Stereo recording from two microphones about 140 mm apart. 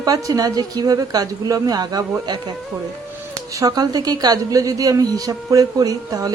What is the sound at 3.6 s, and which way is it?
Speech, 25° right (ahead or behind).